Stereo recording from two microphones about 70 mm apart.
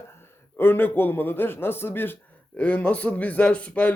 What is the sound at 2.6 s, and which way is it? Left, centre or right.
Speech, centre.